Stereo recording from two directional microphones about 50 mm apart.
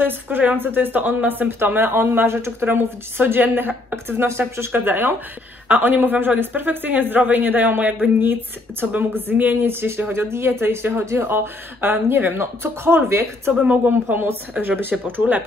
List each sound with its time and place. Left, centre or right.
0.0 s speech: right
3.9 s speech: right
4.7 s speech: right
13.5 s speech: right